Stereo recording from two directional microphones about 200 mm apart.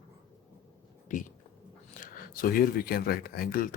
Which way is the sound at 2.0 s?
45° left (ahead or behind).